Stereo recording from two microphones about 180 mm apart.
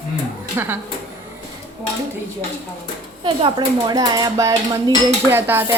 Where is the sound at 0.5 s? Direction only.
15° right (ahead or behind).